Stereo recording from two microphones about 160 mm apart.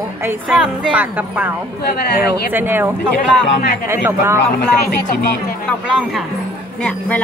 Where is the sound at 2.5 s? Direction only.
15° right (ahead or behind).